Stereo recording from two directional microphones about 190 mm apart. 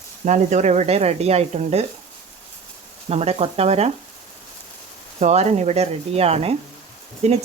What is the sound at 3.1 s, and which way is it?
Speech, 35° right (ahead or behind).